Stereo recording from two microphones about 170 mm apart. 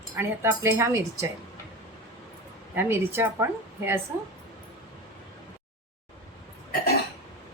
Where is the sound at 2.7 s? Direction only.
15° right (ahead or behind).